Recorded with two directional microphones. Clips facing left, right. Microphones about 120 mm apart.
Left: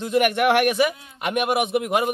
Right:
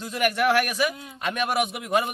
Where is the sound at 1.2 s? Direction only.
15° left (ahead or behind).